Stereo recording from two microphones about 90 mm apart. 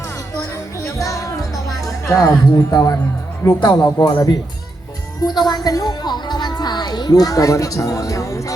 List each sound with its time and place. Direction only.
0.9 s music: 40° left (ahead or behind)
2.0 s speech: 35° left (ahead or behind)